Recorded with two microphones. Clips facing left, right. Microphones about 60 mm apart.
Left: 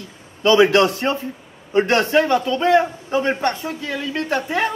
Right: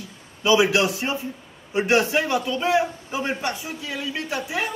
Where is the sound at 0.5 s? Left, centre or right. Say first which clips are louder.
Left 5 dB; left.